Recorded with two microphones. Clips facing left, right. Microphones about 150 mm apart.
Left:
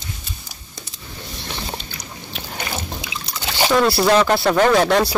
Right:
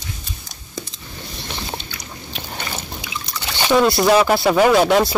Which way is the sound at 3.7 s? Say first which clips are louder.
Right 2 dB; centre (ahead or behind).